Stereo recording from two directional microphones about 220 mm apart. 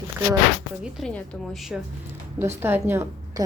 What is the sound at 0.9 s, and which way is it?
Speech, centre (ahead or behind).